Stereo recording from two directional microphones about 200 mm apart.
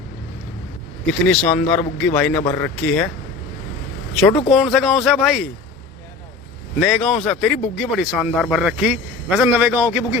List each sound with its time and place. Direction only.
1.3 s speech: 5° left (ahead or behind)
4.1 s speech: 5° left (ahead or behind)
6.7 s speech: centre (ahead or behind)